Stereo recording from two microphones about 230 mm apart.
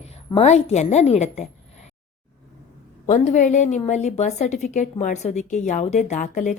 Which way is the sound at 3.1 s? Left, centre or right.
Left.